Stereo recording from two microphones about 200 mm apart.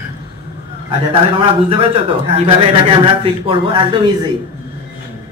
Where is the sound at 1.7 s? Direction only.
25° right (ahead or behind).